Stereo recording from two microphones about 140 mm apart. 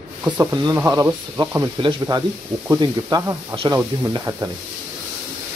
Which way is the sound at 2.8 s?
25° right (ahead or behind).